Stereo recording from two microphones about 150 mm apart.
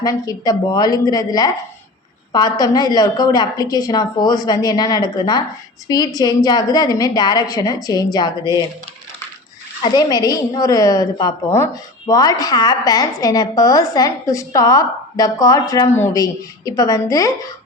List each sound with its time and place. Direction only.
0.0 s a woman's voice: 25° left (ahead or behind)
9.8 s a woman's voice: 30° left (ahead or behind)